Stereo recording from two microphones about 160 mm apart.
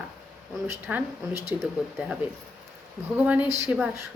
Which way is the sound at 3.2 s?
10° right (ahead or behind).